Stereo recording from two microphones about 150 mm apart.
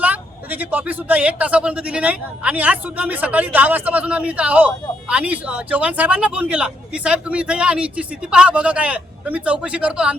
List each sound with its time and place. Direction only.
0.0 s speech: 10° right (ahead or behind)